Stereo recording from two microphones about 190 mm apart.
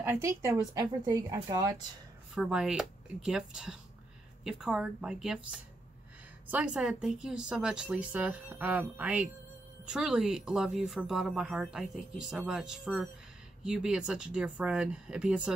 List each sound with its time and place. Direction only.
0.0 s speech: 15° right (ahead or behind)
2.3 s speech: 5° right (ahead or behind)